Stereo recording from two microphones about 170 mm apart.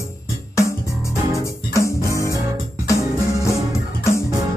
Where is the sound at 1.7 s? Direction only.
15° left (ahead or behind).